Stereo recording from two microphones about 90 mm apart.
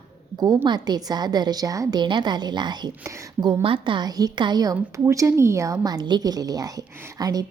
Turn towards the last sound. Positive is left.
turn(degrees=-45)  # may be behind; listen again after turning